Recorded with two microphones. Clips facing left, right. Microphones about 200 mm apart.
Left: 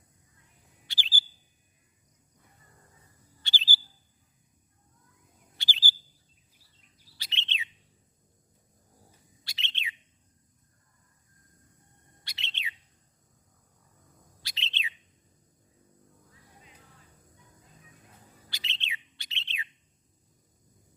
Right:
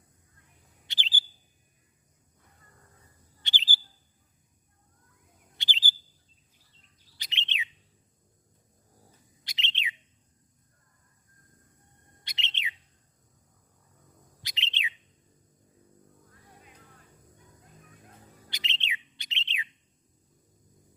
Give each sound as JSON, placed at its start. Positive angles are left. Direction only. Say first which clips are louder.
{"t": 0.9, "sound": "chirp", "louder": "even", "side_deg": -20}
{"t": 3.4, "sound": "bird", "louder": "even", "side_deg": -20}
{"t": 5.5, "sound": "chirp", "louder": "even", "side_deg": -20}
{"t": 7.2, "sound": "bird", "louder": "right 1 dB", "side_deg": -15}
{"t": 9.4, "sound": "bird", "louder": "right 3 dB", "side_deg": -20}
{"t": 12.2, "sound": "bird", "louder": "right 2 dB", "side_deg": -20}
{"t": 14.4, "sound": "bird", "louder": "right 2 dB", "side_deg": -20}
{"t": 18.5, "sound": "bird", "louder": "right 3 dB", "side_deg": -20}